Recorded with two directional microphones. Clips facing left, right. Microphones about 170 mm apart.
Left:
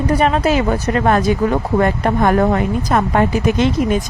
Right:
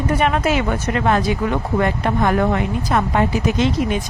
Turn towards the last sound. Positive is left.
turn(degrees=50)  # may be behind; listen again after turning